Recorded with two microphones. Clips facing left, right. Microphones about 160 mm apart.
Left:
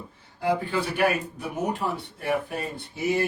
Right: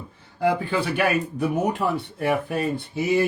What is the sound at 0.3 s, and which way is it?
A man's voice, 70° right (ahead or behind).